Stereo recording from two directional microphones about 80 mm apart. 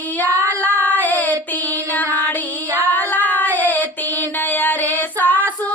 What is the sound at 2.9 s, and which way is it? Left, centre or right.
Child singing, left.